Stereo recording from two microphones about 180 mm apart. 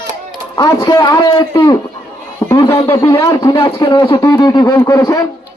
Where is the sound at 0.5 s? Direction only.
20° left (ahead or behind).